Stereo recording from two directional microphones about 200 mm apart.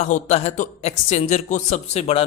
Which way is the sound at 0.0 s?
35° left (ahead or behind).